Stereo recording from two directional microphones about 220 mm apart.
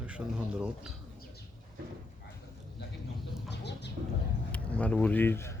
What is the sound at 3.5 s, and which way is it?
Chicken, 50° left (ahead or behind).